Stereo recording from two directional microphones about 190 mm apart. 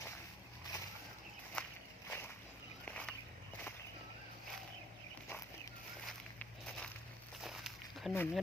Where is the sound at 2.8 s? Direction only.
5° left (ahead or behind).